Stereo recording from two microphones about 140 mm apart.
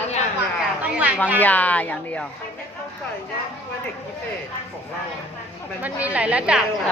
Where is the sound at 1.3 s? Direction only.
10° left (ahead or behind).